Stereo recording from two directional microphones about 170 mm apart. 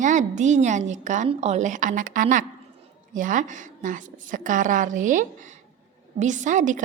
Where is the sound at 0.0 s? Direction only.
50° right (ahead or behind).